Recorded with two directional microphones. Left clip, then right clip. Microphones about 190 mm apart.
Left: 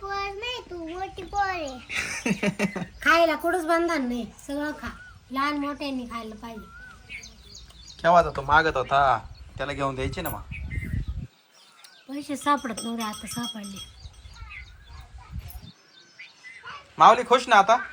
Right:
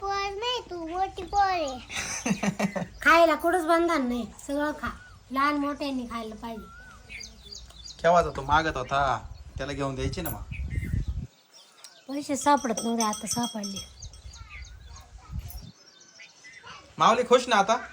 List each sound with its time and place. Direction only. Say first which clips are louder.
0.1 s child singing: right 1 dB; 20° right (ahead or behind)
0.9 s a child's voice: right 3 dB; 15° right (ahead or behind)
12.0 s speech: right 1 dB; 35° right (ahead or behind)
17.0 s a man's voice: left 4 dB; 5° right (ahead or behind)